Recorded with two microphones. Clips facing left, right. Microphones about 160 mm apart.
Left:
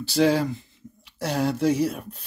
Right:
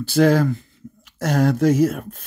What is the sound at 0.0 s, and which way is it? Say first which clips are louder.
Speech: right 4 dB; 50° right (ahead or behind).